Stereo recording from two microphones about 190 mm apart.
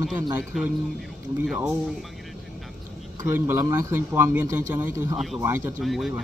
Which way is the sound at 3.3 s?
15° right (ahead or behind).